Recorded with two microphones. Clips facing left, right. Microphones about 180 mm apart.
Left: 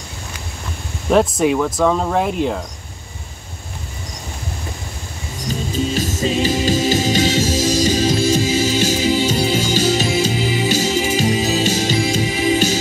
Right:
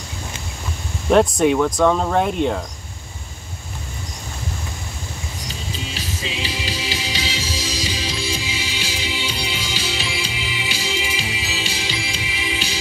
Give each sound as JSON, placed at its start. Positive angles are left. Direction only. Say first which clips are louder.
{"t": 1.1, "sound": "speech", "louder": "even", "side_deg": 0}
{"t": 5.5, "sound": "music", "louder": "left 13 dB", "side_deg": 45}